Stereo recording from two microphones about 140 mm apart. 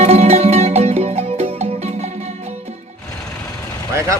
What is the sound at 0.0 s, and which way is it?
Music, 50° right (ahead or behind).